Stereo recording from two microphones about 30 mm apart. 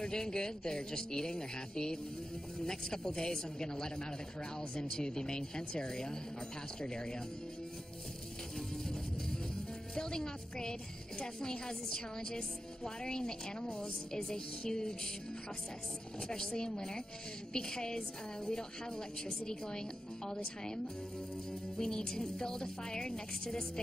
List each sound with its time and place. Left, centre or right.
0.0 s a woman's voice: left
8.5 s music: centre
9.9 s a woman's voice: left
16.3 s a woman's voice: left
21.7 s a woman's voice: centre